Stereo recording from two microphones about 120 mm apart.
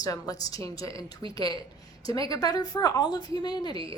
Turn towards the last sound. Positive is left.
turn(degrees=35)  # may be behind; listen again after turning